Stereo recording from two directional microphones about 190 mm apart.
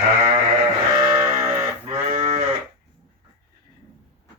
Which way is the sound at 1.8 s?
35° right (ahead or behind).